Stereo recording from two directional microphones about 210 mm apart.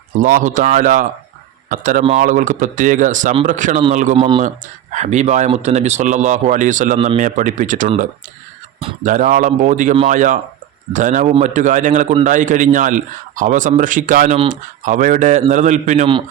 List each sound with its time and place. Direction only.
0.2 s speech: 40° right (ahead or behind)
4.2 s speech: 25° right (ahead or behind)
4.4 s speech: 35° right (ahead or behind)
9.0 s speech: 40° right (ahead or behind)